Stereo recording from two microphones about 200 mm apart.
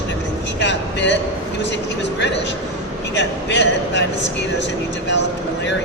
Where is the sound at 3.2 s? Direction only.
60° left (ahead or behind).